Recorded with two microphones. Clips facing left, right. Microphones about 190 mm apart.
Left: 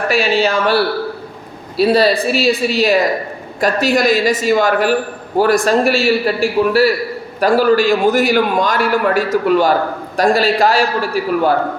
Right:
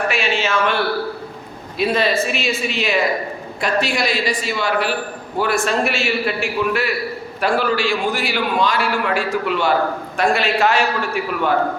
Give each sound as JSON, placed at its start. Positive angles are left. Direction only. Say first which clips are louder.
{"t": 0.1, "sound": "a man's voice", "louder": "left 6 dB", "side_deg": 35}